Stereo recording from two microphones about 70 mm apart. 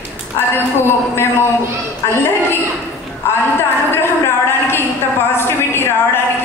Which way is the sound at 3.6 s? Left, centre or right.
Left.